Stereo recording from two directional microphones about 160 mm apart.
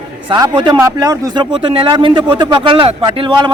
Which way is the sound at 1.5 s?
35° right (ahead or behind).